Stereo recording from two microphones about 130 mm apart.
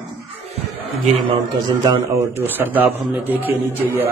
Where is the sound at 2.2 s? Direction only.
15° right (ahead or behind).